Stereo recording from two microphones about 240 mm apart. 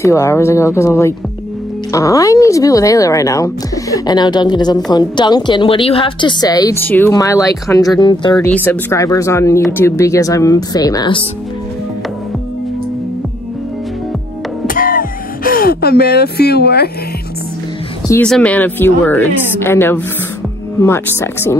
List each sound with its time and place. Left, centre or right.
0.0 s speech: centre
8.5 s speech: centre
14.7 s music: left
18.0 s speech: centre